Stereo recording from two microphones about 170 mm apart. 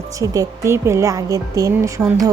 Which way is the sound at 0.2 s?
20° right (ahead or behind).